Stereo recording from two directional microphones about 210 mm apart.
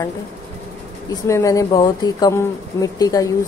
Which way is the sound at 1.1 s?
15° left (ahead or behind).